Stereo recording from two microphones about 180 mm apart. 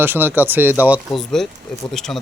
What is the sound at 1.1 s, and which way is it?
A man's voice, centre (ahead or behind).